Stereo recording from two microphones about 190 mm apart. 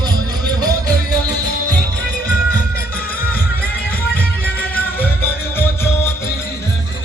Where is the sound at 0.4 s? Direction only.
20° right (ahead or behind).